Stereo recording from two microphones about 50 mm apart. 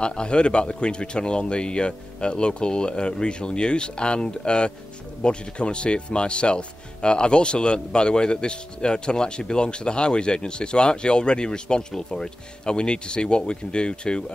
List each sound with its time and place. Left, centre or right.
0.0 s speech: centre